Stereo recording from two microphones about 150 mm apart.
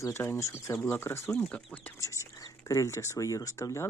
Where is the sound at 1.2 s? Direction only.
5° left (ahead or behind).